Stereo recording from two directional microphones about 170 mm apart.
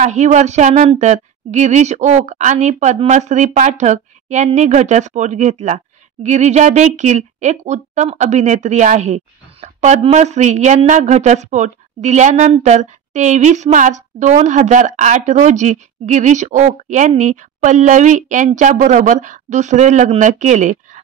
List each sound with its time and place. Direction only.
0.0 s speech: 45° right (ahead or behind)